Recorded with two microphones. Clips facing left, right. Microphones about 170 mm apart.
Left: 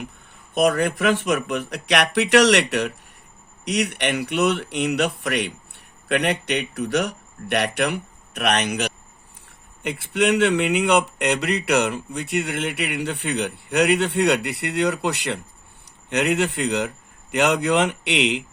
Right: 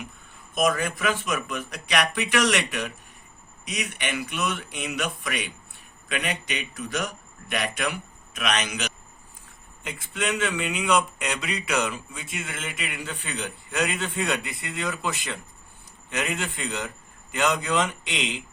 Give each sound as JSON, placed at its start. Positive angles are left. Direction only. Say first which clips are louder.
{"t": 0.5, "sound": "speech", "louder": "left 5 dB", "side_deg": 70}